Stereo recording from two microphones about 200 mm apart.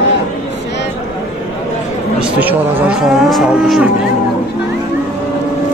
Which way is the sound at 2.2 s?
10° right (ahead or behind).